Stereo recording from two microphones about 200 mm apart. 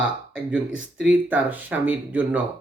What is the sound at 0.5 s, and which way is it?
Speech, 5° right (ahead or behind).